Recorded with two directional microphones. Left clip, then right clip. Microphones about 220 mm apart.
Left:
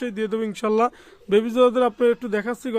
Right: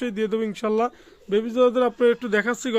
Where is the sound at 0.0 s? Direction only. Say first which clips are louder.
Right 1 dB; 5° right (ahead or behind).